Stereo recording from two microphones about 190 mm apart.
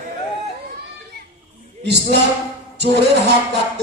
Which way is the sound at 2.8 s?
60° right (ahead or behind).